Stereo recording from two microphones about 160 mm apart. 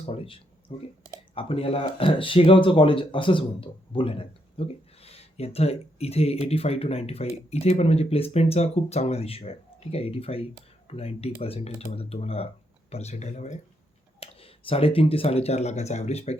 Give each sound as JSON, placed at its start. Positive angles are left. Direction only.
{"t": 0.0, "sound": "speech", "side_deg": 35}
{"t": 14.2, "sound": "speech", "side_deg": 35}